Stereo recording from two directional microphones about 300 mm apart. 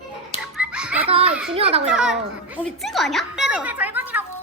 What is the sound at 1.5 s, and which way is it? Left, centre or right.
Speech, centre.